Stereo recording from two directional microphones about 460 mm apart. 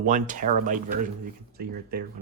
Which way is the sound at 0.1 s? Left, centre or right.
Centre.